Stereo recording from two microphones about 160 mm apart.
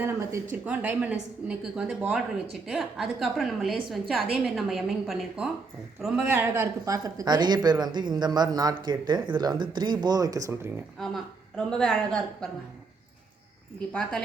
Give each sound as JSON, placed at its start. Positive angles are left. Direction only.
{"t": 0.0, "sound": "speech", "side_deg": -15}
{"t": 0.6, "sound": "a woman's voice", "side_deg": -5}
{"t": 10.9, "sound": "a woman's voice", "side_deg": 0}